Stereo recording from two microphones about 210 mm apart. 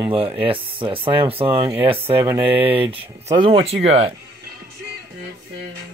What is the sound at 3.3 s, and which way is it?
Speech, 25° right (ahead or behind).